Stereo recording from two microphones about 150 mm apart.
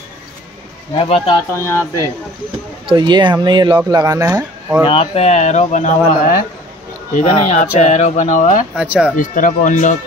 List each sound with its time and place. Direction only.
0.9 s speech: 40° left (ahead or behind)
1.5 s speech: 15° left (ahead or behind)
2.9 s speech: 30° right (ahead or behind); by 4.8 s 15° right (ahead or behind)
4.8 s speech: 40° left (ahead or behind)
8.7 s speech: 5° right (ahead or behind)
9.1 s speech: 60° left (ahead or behind)